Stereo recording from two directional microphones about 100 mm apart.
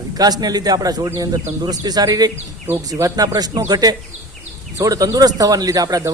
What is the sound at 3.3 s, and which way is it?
Speech, 40° right (ahead or behind).